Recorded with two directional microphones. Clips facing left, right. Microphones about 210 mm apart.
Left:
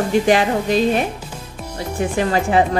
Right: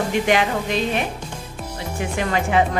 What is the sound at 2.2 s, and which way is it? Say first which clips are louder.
Speech: left 3 dB; 35° left (ahead or behind).